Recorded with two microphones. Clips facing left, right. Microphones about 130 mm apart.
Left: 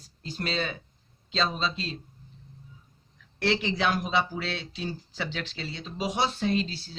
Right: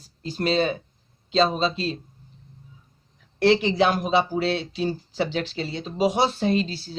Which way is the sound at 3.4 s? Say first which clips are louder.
Right 8 dB; 35° right (ahead or behind).